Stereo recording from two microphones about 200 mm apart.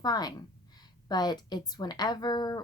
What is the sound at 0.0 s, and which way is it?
Speech, 20° left (ahead or behind).